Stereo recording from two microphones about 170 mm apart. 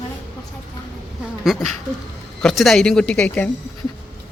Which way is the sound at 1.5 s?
Centre (ahead or behind).